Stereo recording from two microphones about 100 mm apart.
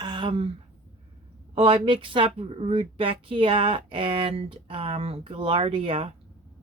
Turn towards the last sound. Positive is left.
turn(degrees=-65)  # may be behind; listen again after turning